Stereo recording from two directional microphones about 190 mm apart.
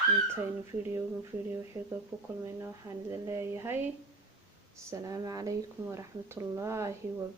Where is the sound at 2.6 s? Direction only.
15° right (ahead or behind).